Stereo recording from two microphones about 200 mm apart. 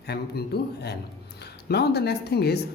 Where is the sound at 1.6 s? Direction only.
55° left (ahead or behind).